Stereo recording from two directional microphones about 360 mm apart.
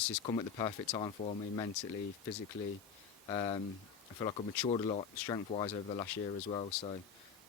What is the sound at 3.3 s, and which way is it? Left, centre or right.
Speech, centre.